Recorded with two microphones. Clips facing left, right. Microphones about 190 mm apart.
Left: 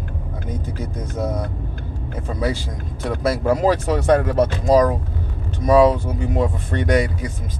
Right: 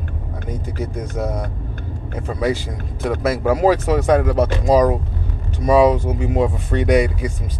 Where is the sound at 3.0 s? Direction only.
5° right (ahead or behind).